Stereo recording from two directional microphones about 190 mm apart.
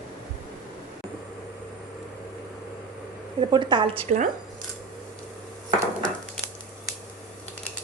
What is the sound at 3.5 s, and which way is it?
Speech, 25° right (ahead or behind).